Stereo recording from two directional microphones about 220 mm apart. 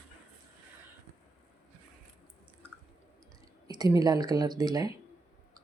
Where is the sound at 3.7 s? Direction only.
15° right (ahead or behind).